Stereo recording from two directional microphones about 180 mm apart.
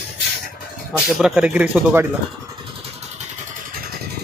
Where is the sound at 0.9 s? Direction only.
5° right (ahead or behind).